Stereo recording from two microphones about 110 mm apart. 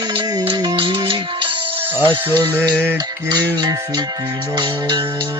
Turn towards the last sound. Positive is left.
turn(degrees=-40)  # may be behind; listen again after turning